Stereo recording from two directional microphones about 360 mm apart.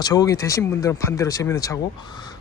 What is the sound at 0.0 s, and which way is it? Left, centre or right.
Speech, centre.